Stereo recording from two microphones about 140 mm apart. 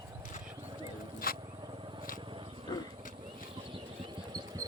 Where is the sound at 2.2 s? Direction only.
35° right (ahead or behind).